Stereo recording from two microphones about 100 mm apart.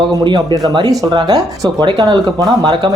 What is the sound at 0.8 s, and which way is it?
Speech, 40° right (ahead or behind).